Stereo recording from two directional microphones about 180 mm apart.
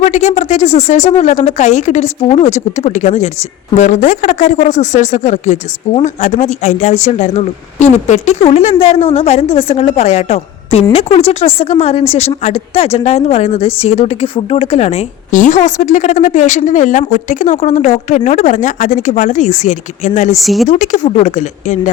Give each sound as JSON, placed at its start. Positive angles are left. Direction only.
{"t": 0.0, "sound": "a woman's voice", "side_deg": 40}
{"t": 20.4, "sound": "speech", "side_deg": 0}
{"t": 20.7, "sound": "speech", "side_deg": 45}